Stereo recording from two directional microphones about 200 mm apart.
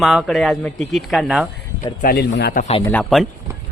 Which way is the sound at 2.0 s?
50° left (ahead or behind).